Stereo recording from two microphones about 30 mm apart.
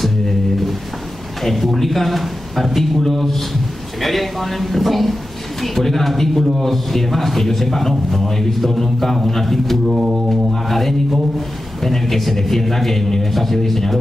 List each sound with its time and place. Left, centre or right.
1.4 s a man's voice: centre
9.8 s mantra: centre
10.3 s a man's voice: centre